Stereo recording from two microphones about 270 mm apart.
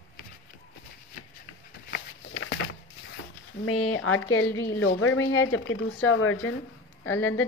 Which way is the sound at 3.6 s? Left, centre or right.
Left.